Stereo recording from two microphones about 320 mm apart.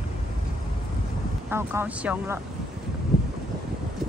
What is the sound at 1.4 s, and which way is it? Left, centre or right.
Speech, centre.